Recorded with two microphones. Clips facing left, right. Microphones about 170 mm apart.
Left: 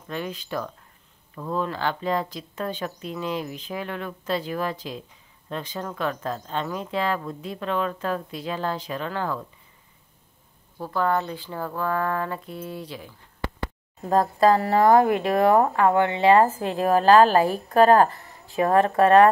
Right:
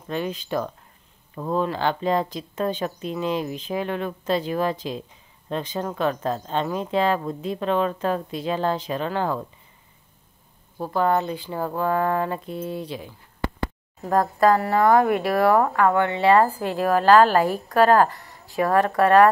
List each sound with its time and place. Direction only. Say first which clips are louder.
0.1 s speech: right 4 dB; 20° right (ahead or behind)
10.8 s speech: right 3 dB; 20° right (ahead or behind)
14.4 s speech: even; 25° left (ahead or behind)